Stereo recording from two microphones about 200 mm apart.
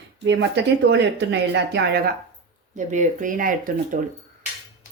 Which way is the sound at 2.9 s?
40° right (ahead or behind).